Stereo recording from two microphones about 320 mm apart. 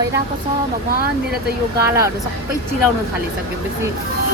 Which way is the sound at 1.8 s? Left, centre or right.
Centre.